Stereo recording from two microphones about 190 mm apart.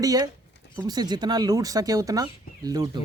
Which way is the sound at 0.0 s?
20° right (ahead or behind).